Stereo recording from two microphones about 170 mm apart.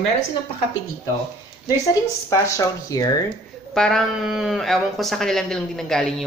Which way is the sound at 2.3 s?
20° left (ahead or behind).